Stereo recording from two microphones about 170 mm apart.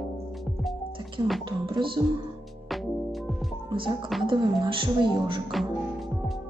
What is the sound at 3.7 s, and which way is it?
Speech, 30° right (ahead or behind).